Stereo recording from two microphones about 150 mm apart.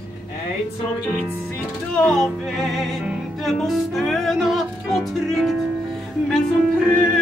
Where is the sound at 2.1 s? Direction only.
5° left (ahead or behind).